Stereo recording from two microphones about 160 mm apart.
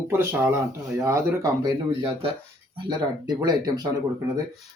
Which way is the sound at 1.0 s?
20° right (ahead or behind).